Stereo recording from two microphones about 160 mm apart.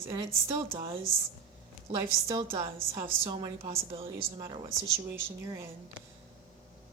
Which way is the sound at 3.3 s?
30° right (ahead or behind).